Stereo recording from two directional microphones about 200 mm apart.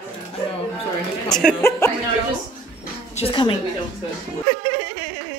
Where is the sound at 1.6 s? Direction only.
10° left (ahead or behind).